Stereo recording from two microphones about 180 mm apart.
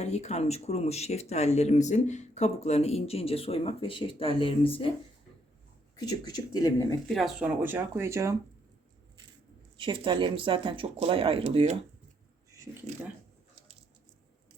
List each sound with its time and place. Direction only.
0.0 s speech: 40° left (ahead or behind)
6.0 s speech: 20° left (ahead or behind)
7.1 s speech: centre (ahead or behind); by 8.4 s 15° right (ahead or behind)
9.7 s speech: 25° right (ahead or behind)
12.5 s speech: 15° right (ahead or behind)